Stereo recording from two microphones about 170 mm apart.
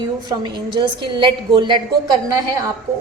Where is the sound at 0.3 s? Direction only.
25° right (ahead or behind).